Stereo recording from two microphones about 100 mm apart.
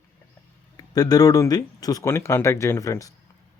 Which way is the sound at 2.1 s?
25° left (ahead or behind).